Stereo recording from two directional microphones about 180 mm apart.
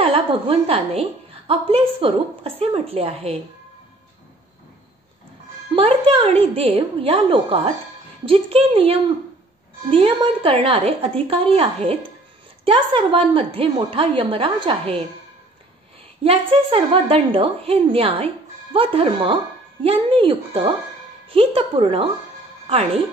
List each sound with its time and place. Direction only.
0.0 s a woman's voice: 30° right (ahead or behind)
5.8 s a woman's voice: 30° right (ahead or behind)
16.3 s a woman's voice: 30° right (ahead or behind)